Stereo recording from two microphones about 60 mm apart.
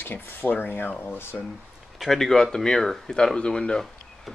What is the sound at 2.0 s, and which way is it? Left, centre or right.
Speech, centre.